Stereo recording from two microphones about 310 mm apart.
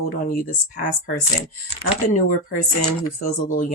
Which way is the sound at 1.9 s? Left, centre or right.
Left.